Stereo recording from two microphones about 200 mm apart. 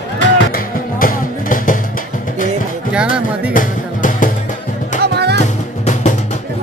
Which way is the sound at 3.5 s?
40° left (ahead or behind).